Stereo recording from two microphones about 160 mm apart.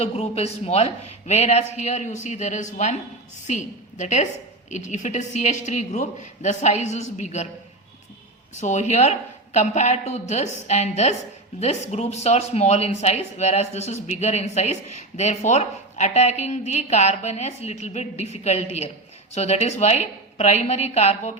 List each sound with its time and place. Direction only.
0.0 s speech: 40° left (ahead or behind)
8.5 s speech: 45° left (ahead or behind)